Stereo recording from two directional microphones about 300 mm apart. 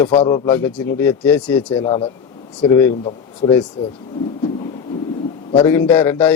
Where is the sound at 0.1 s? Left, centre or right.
Centre.